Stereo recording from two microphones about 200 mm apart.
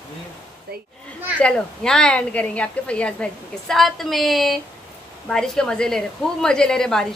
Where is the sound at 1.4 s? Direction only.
5° left (ahead or behind).